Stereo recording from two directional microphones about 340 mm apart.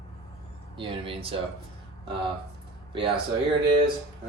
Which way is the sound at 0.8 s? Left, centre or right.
Centre.